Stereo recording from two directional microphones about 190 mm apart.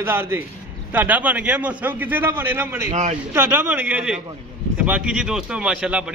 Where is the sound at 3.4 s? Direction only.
10° right (ahead or behind).